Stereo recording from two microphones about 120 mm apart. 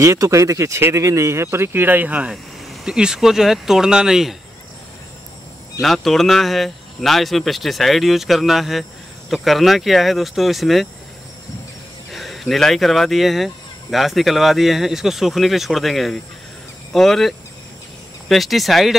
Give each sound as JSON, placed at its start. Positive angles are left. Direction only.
{"t": 0.0, "sound": "speech", "side_deg": -25}
{"t": 5.8, "sound": "speech", "side_deg": 0}
{"t": 12.1, "sound": "speech", "side_deg": 0}